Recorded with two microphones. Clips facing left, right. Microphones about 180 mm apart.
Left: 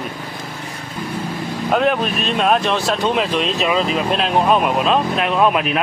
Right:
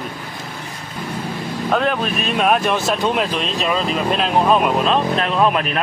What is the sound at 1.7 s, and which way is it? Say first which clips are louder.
Speech: left 2 dB; 5° left (ahead or behind).